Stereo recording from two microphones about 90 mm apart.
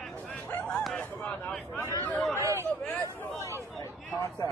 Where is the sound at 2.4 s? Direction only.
35° right (ahead or behind).